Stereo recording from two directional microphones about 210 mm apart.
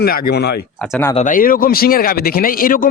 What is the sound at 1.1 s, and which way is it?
A man's voice, 40° left (ahead or behind).